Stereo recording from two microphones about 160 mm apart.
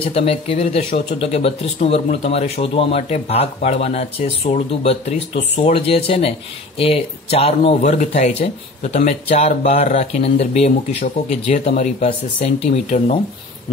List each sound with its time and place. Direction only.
0.0 s speech: 35° left (ahead or behind)